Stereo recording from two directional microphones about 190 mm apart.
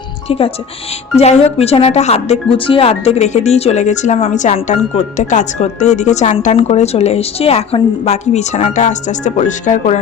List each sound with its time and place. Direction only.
0.3 s speech: 30° left (ahead or behind)
1.5 s speech: 30° left (ahead or behind)